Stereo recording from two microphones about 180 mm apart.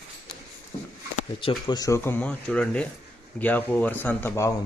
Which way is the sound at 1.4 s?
25° left (ahead or behind).